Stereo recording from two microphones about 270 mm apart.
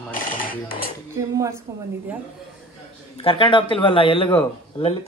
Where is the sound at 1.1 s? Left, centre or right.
Centre.